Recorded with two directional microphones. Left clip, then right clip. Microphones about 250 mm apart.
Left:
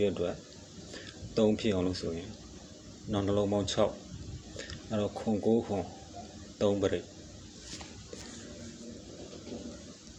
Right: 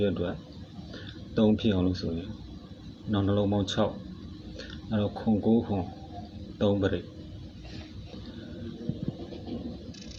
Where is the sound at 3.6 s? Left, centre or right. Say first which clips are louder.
Even; centre.